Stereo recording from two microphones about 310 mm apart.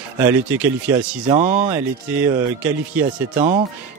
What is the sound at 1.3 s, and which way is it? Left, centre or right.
Speech, right.